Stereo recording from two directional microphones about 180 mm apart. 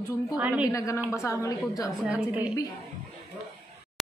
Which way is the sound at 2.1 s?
5° right (ahead or behind).